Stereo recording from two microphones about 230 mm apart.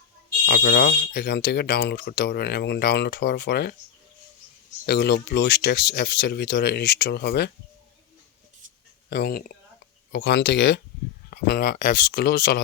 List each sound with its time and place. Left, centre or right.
0.4 s speech: left
4.9 s speech: left
9.0 s speech: left